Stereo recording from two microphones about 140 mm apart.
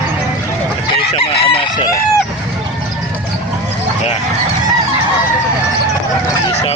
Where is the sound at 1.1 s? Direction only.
45° left (ahead or behind).